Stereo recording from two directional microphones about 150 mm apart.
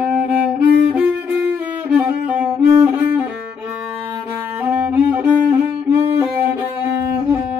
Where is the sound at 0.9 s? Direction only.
10° right (ahead or behind).